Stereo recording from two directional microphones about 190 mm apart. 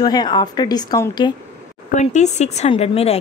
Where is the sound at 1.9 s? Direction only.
40° left (ahead or behind).